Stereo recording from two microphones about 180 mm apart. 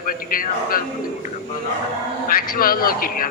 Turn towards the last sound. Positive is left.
turn(degrees=55)  # may be behind; listen again after turning